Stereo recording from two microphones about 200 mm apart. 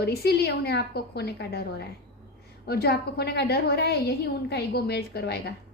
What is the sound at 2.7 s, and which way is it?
A woman's voice, 50° left (ahead or behind).